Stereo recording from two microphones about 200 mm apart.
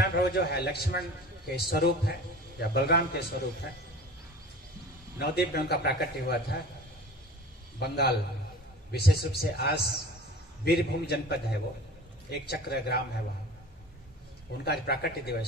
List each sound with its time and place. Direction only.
0.0 s a man's voice: 55° left (ahead or behind)
5.2 s a man's voice: 50° left (ahead or behind)
7.8 s a man's voice: 55° left (ahead or behind)
14.6 s a man's voice: 55° left (ahead or behind)